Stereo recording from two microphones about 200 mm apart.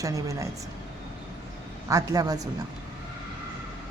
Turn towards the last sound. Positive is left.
turn(degrees=-20)  # may be behind; listen again after turning